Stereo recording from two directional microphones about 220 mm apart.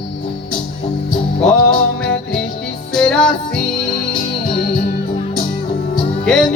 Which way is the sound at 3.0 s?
5° left (ahead or behind).